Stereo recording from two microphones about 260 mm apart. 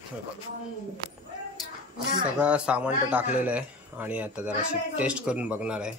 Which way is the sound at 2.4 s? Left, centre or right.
Centre.